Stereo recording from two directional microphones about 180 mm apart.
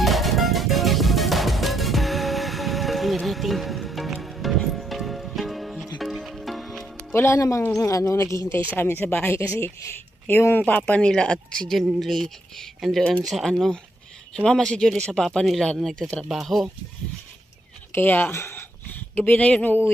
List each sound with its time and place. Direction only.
0.0 s music: centre (ahead or behind)
7.1 s speech: 15° left (ahead or behind)
17.9 s speech: 10° left (ahead or behind)